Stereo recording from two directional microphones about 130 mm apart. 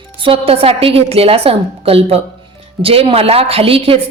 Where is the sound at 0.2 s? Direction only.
45° right (ahead or behind).